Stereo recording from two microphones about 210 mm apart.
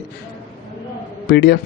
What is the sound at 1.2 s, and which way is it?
Speech, 50° left (ahead or behind).